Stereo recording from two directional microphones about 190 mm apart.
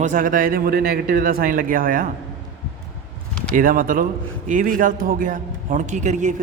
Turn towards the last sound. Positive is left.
turn(degrees=-40)  # may be behind; listen again after turning